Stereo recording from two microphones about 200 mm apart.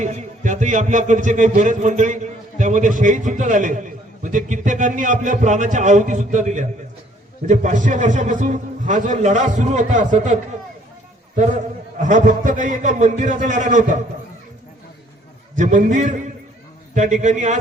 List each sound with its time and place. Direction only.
0.0 s a man's voice: 35° right (ahead or behind)
11.9 s a man's voice: 40° right (ahead or behind)
15.5 s a man's voice: 40° right (ahead or behind)